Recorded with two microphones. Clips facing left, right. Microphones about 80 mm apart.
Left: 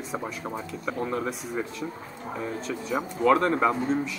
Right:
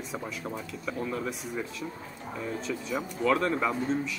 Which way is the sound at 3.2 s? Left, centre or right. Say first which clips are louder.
Left 5 dB; left.